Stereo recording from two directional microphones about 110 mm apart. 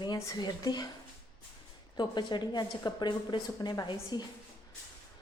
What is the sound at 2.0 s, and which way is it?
Speech, 45° left (ahead or behind).